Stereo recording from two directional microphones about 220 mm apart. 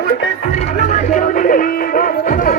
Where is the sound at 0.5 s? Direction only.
35° left (ahead or behind).